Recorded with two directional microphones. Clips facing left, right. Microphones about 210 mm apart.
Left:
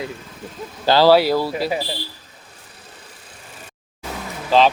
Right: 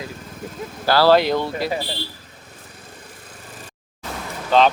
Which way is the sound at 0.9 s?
20° left (ahead or behind).